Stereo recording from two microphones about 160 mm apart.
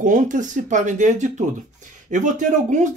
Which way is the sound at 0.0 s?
50° right (ahead or behind).